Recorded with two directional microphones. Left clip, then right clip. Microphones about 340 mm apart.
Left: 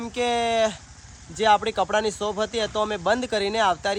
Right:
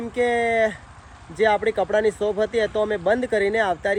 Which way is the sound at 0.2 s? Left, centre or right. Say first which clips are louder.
Right 2 dB; centre.